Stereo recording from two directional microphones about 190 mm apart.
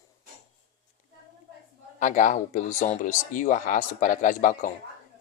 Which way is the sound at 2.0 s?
40° left (ahead or behind).